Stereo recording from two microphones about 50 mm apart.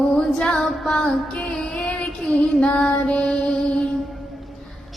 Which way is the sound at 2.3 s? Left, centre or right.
Left.